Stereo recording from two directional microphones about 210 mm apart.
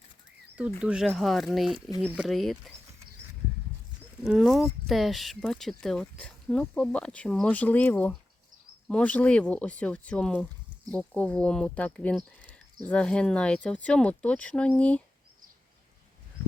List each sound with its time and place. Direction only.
0.8 s speech: 5° right (ahead or behind)
4.2 s speech: centre (ahead or behind)